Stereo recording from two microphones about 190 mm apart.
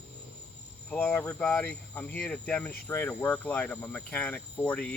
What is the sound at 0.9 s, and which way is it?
Cricket, 10° left (ahead or behind).